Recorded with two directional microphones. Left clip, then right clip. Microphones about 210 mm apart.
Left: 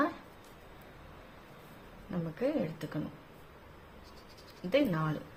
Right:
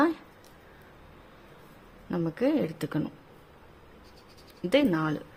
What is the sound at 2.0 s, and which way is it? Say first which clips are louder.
Speech: right 7 dB; 55° right (ahead or behind).